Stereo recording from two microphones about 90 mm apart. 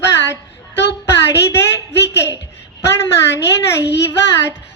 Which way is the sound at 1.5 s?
30° left (ahead or behind).